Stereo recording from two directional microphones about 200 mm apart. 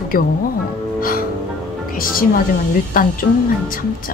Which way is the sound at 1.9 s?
45° left (ahead or behind).